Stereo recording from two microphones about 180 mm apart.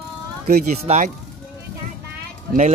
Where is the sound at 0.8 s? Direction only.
40° right (ahead or behind).